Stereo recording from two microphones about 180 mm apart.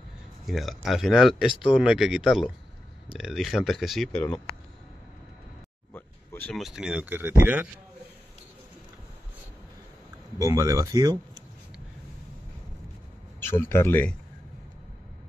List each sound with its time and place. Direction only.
0.5 s speech: centre (ahead or behind)
5.9 s a sound: 10° left (ahead or behind)
6.5 s speech: centre (ahead or behind)
10.4 s speech: 20° right (ahead or behind)
13.4 s speech: 15° left (ahead or behind)